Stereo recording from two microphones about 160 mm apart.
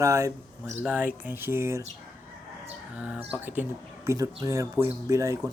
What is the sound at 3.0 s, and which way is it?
Speech, 10° right (ahead or behind).